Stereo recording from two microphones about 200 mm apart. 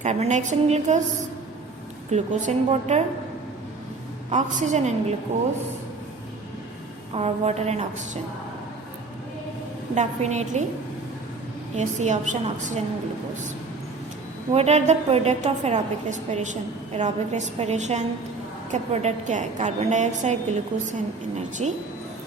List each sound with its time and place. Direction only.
0.0 s a woman's voice: 35° right (ahead or behind)
2.0 s a woman's voice: 35° right (ahead or behind)
4.3 s a woman's voice: 35° right (ahead or behind)
7.1 s a woman's voice: 30° right (ahead or behind)
9.9 s a woman's voice: 35° right (ahead or behind)
11.8 s a woman's voice: 35° right (ahead or behind)
14.5 s a woman's voice: 35° right (ahead or behind)
21.6 s a woman's voice: 30° right (ahead or behind)